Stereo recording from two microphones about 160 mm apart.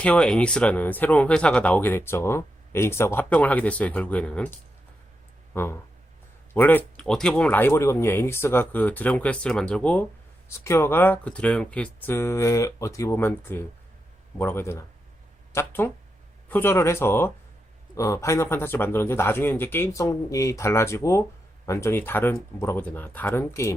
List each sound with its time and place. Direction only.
0.0 s speech: 5° left (ahead or behind)